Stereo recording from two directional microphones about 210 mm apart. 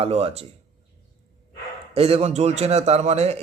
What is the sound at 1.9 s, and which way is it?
A man's voice, 30° right (ahead or behind).